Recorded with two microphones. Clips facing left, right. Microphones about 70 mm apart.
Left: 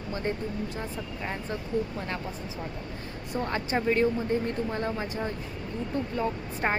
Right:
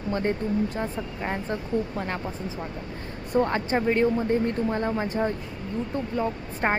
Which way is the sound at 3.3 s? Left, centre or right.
Right.